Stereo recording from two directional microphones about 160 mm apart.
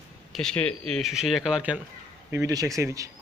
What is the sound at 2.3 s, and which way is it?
Speech, 20° right (ahead or behind).